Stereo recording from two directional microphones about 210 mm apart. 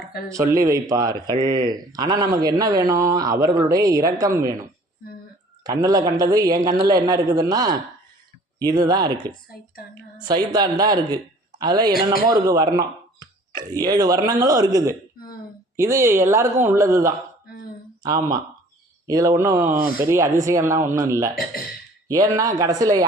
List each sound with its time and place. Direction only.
0.3 s speech: 15° right (ahead or behind)
5.6 s speech: 20° right (ahead or behind)
19.0 s speech: 15° right (ahead or behind)